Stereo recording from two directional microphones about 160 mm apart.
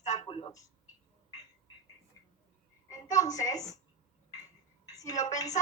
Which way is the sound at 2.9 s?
20° left (ahead or behind).